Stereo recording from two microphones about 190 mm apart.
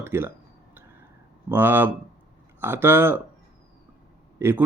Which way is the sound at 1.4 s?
10° right (ahead or behind).